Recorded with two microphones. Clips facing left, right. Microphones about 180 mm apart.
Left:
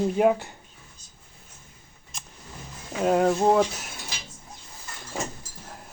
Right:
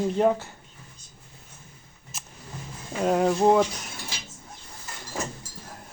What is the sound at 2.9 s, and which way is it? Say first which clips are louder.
Speech: left 1 dB; centre (ahead or behind).